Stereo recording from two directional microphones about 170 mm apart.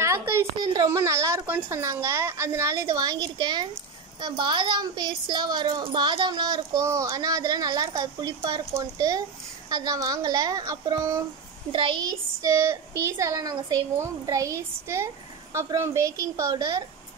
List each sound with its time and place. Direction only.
0.0 s a woman's voice: 15° right (ahead or behind)